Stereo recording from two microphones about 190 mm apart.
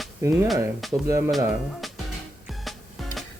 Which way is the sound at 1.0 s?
15° right (ahead or behind).